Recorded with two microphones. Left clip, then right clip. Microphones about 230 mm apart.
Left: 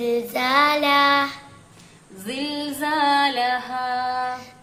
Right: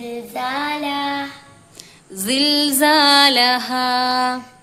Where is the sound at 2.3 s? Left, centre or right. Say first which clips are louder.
Right 11 dB; right.